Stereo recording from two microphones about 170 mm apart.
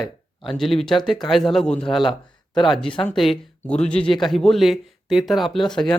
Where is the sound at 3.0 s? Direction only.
Centre (ahead or behind).